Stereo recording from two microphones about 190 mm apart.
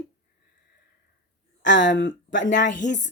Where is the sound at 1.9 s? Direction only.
80° left.